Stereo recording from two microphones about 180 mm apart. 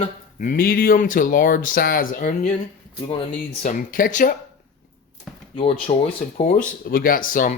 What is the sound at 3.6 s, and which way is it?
Speech, 50° left (ahead or behind).